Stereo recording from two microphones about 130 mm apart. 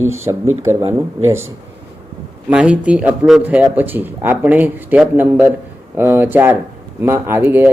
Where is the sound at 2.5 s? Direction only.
10° right (ahead or behind).